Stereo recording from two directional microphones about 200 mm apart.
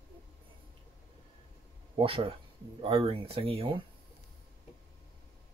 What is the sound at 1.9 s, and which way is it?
Speech, 25° right (ahead or behind).